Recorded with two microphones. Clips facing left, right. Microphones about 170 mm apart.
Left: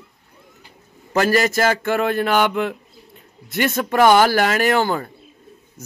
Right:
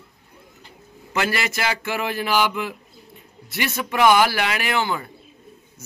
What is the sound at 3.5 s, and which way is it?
Speech, 50° left (ahead or behind).